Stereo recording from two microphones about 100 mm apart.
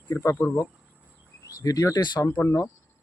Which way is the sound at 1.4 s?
35° left (ahead or behind).